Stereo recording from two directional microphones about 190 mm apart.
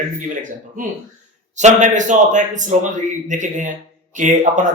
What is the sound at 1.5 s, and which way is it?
Speech, 40° right (ahead or behind).